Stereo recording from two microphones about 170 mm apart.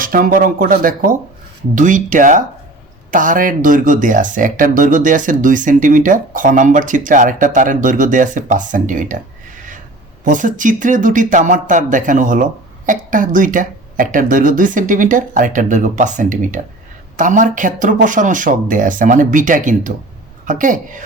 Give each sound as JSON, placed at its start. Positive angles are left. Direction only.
{"t": 0.0, "sound": "speech", "side_deg": -55}
{"t": 10.2, "sound": "speech", "side_deg": -50}